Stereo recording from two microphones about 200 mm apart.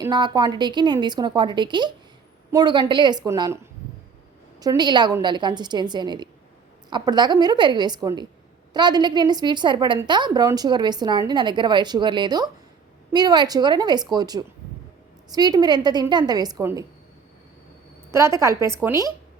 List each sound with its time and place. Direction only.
0.0 s a woman's voice: 20° right (ahead or behind)
18.1 s speech: 15° right (ahead or behind)